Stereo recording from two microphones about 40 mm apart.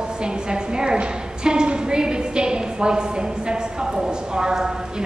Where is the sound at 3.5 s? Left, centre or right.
Centre.